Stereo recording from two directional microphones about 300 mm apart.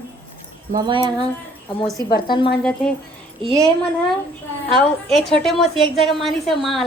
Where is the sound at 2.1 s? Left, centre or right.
Centre.